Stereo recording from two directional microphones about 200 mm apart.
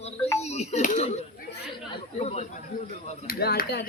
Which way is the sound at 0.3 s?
35° left (ahead or behind).